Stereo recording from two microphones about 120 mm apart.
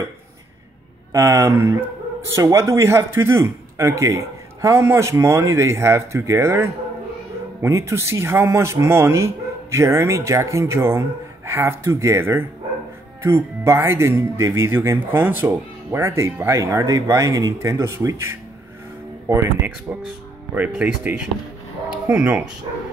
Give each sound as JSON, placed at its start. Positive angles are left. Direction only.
{"t": 1.1, "sound": "speech", "side_deg": -25}